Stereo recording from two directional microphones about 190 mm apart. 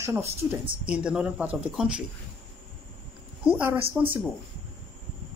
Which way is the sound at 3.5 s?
10° right (ahead or behind).